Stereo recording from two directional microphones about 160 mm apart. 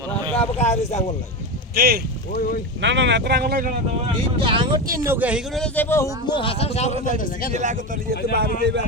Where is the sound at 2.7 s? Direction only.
90° right; by 3.8 s 65° right (ahead or behind).